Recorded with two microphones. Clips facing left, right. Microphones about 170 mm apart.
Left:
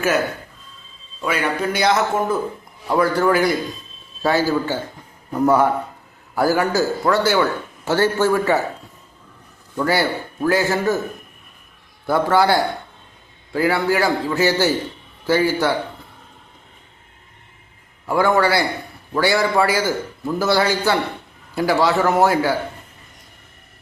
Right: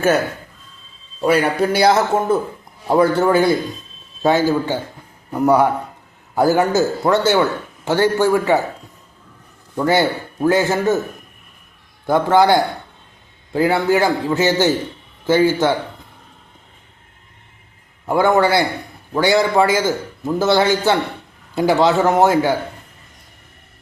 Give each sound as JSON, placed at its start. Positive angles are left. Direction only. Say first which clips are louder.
{"t": 1.2, "sound": "a man's voice", "louder": "right 6 dB", "side_deg": -35}
{"t": 9.7, "sound": "a man's voice", "louder": "right 3 dB", "side_deg": -20}
{"t": 12.0, "sound": "a man's voice", "louder": "right 3 dB", "side_deg": -20}
{"t": 18.0, "sound": "a man's voice", "louder": "right 2 dB", "side_deg": -25}